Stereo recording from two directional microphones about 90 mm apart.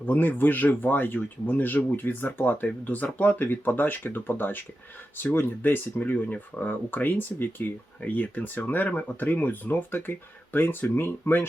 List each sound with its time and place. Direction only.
0.0 s speech: 20° left (ahead or behind)